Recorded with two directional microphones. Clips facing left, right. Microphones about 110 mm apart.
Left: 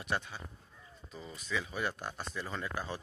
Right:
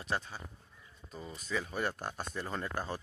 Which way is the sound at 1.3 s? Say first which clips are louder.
Right 1 dB; 45° right (ahead or behind).